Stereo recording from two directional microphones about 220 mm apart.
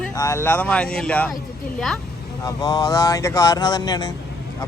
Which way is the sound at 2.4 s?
15° left (ahead or behind).